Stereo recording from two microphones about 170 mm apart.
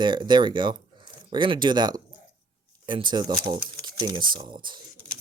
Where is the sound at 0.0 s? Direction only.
25° right (ahead or behind).